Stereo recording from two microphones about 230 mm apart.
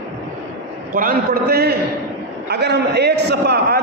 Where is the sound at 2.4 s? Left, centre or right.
Right.